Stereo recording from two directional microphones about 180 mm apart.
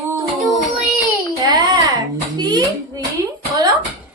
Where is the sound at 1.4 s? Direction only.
20° right (ahead or behind).